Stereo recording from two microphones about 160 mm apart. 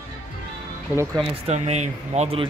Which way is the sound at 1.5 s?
45° right (ahead or behind).